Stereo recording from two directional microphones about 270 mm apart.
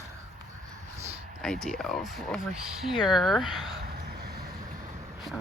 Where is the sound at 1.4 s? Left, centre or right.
Centre.